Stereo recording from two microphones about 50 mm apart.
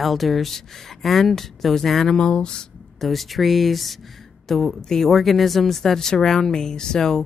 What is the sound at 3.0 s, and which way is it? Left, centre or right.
Speech, centre.